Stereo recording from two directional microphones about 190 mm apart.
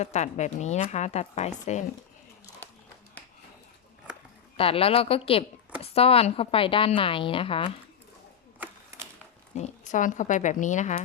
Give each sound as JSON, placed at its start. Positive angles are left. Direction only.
{"t": 0.0, "sound": "a woman's voice", "side_deg": 35}
{"t": 4.5, "sound": "a woman's voice", "side_deg": 30}
{"t": 9.6, "sound": "a woman's voice", "side_deg": 40}